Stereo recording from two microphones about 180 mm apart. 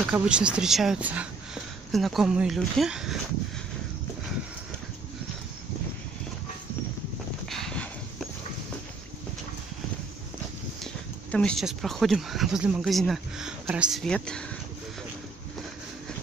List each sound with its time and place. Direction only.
0.0 s speech: 5° right (ahead or behind)
7.4 s a sound: 5° left (ahead or behind)
11.3 s speech: 5° left (ahead or behind)